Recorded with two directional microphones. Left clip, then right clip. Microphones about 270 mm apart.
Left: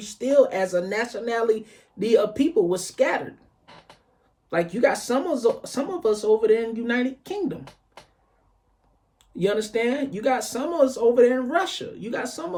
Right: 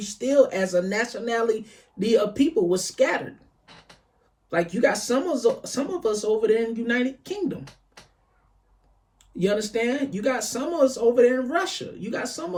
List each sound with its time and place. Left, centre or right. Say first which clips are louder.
0.0 s speech: left 1 dB; centre
4.4 s speech: left 1 dB; centre
9.3 s speech: left 1 dB; centre